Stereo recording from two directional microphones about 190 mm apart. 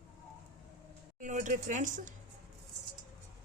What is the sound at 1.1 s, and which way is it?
Speech, 40° right (ahead or behind).